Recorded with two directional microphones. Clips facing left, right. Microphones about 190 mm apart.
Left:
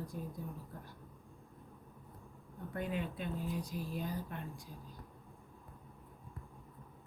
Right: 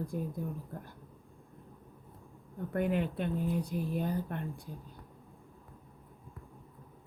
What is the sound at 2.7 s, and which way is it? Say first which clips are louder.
Speech: right 8 dB; 60° right (ahead or behind).